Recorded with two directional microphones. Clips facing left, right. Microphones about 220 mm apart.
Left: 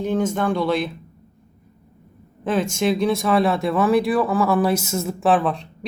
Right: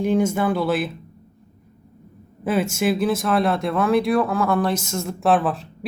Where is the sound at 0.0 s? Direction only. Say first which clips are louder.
Right 2 dB; 10° right (ahead or behind).